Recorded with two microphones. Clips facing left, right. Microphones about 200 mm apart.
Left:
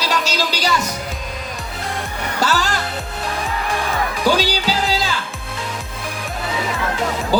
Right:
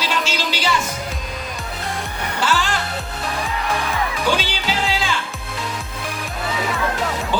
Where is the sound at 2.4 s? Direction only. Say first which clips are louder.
Left 1 dB; 40° left (ahead or behind).